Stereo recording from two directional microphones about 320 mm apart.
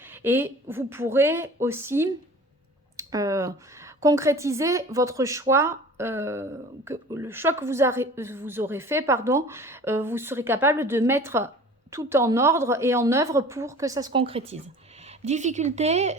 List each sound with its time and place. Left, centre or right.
0.0 s a woman's voice: centre